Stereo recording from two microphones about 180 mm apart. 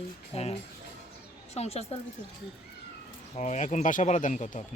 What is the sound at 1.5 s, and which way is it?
Speech, 35° left (ahead or behind).